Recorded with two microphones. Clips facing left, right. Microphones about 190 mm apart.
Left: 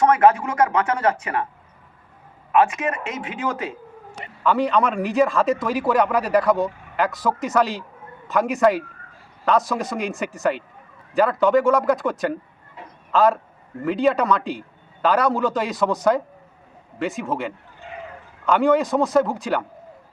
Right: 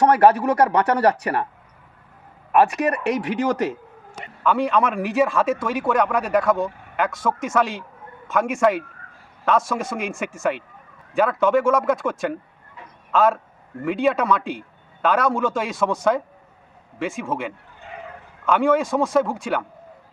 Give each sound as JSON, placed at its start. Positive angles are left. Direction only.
{"t": 0.0, "sound": "speech", "side_deg": -35}
{"t": 2.6, "sound": "speech", "side_deg": -40}
{"t": 3.1, "sound": "speech", "side_deg": -70}
{"t": 4.4, "sound": "speech", "side_deg": 0}